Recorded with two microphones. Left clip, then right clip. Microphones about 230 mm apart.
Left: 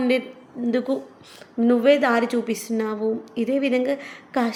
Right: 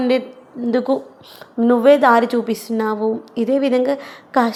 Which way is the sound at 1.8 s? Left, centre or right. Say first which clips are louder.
Right 8 dB; centre.